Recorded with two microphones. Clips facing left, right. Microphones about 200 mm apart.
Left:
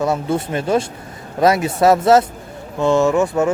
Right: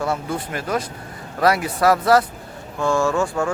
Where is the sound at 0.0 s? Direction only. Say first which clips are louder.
Left 5 dB; 20° left (ahead or behind).